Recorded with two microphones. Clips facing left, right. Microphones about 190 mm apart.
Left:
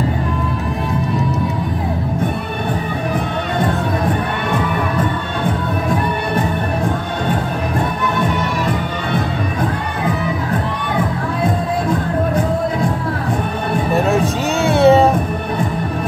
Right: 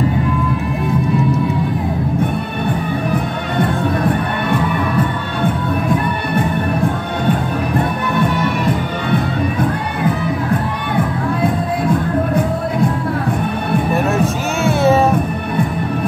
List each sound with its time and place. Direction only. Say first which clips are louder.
14.6 s music: left 3 dB; 30° left (ahead or behind)